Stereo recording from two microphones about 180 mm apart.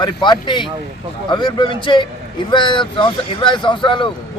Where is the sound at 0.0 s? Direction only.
25° left (ahead or behind).